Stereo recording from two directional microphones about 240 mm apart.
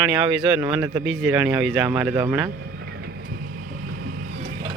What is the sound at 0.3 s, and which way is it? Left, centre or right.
Speech, centre.